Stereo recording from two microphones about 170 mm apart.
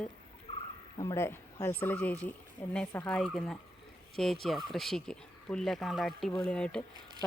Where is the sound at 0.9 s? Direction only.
15° left (ahead or behind).